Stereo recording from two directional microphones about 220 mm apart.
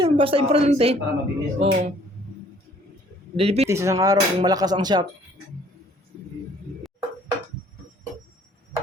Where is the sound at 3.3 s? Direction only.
30° right (ahead or behind).